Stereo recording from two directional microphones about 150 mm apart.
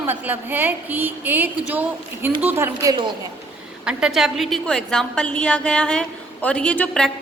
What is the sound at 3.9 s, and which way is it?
A woman's voice, 5° right (ahead or behind).